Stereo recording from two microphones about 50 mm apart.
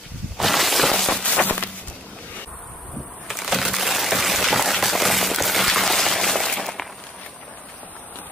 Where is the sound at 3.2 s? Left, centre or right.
Centre.